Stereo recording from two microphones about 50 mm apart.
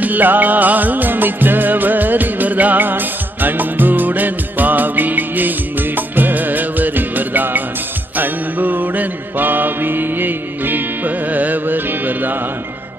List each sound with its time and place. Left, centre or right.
0.0 s music: right
8.2 s mantra: right